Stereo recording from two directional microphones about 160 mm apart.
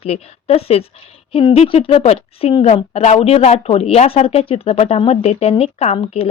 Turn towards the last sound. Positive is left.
turn(degrees=40)  # may be behind; listen again after turning